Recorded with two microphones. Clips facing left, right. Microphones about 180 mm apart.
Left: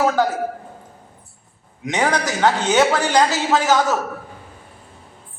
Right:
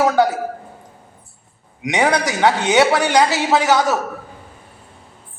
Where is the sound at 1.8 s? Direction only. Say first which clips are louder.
Right 3 dB; 15° right (ahead or behind).